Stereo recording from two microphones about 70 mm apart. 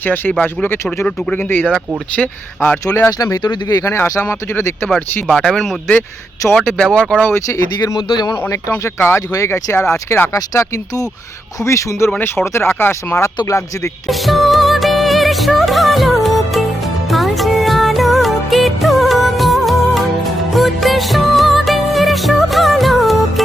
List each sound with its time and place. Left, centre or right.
0.0 s speech: left
2.8 s speech: left
3.3 s speech: left
3.8 s speech: left
5.3 s speech: centre
6.7 s speech: centre
7.8 s a man's voice: left
9.0 s speech: left
10.3 s speech: left
14.1 s music: centre